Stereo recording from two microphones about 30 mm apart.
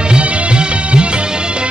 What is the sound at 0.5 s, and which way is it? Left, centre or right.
Music, right.